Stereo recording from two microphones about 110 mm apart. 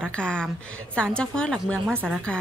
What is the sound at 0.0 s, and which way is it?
A woman's voice, 10° left (ahead or behind).